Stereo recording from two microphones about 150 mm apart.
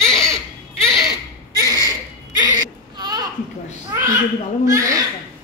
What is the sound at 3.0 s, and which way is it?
Children playing, 30° right (ahead or behind).